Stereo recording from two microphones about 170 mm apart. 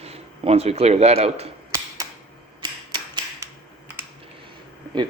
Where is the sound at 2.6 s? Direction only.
25° right (ahead or behind).